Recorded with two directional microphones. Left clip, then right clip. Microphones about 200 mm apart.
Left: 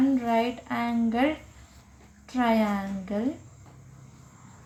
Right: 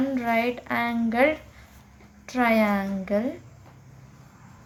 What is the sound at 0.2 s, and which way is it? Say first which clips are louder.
A woman's voice: right 2 dB; 55° right (ahead or behind).